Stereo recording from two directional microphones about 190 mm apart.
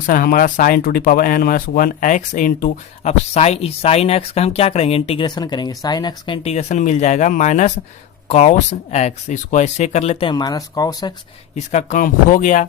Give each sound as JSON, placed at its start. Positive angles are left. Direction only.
{"t": 0.0, "sound": "speech", "side_deg": 45}
{"t": 11.5, "sound": "speech", "side_deg": 40}